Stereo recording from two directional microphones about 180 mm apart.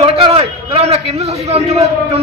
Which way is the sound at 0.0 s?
30° right (ahead or behind).